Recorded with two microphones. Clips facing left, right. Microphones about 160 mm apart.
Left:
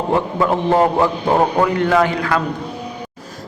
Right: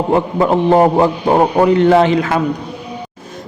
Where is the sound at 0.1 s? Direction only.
20° right (ahead or behind).